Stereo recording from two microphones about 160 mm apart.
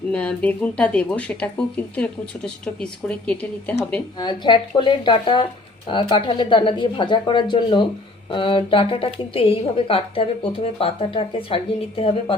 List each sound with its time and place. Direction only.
0.1 s speech: 5° left (ahead or behind)
4.2 s a woman's voice: 30° left (ahead or behind)